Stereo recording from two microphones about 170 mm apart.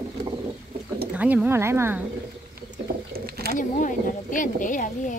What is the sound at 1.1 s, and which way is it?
Speech, 10° right (ahead or behind).